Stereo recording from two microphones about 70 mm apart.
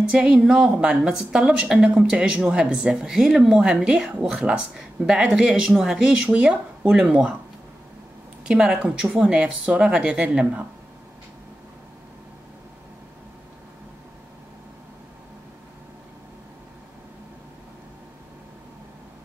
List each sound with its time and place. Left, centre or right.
0.1 s a woman's voice: centre
8.5 s a woman's voice: centre
10.4 s speech: right